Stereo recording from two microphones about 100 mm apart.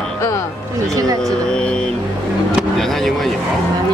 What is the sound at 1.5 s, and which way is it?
Speech, 10° left (ahead or behind).